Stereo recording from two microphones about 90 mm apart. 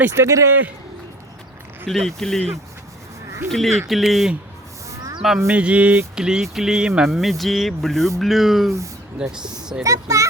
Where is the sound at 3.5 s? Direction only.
Centre (ahead or behind).